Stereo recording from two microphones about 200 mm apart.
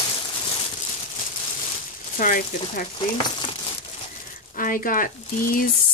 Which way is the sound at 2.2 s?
45° left (ahead or behind).